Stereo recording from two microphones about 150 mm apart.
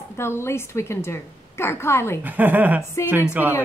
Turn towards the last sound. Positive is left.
turn(degrees=-10)  # may be behind; listen again after turning